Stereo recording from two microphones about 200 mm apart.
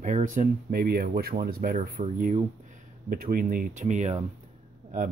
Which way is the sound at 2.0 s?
40° right (ahead or behind).